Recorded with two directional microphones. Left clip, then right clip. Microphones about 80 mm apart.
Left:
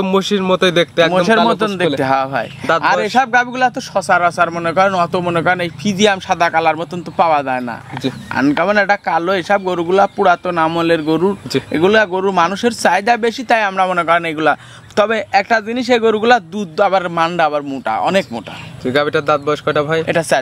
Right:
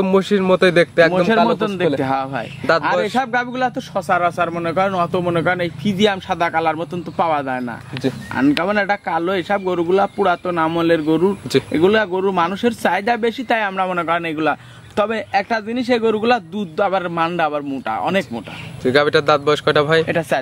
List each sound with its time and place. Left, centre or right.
0.0 s speech: centre
1.1 s speech: left
18.9 s speech: centre
20.1 s speech: left